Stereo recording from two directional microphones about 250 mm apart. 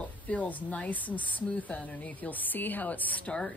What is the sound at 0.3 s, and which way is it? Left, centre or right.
Speech, centre.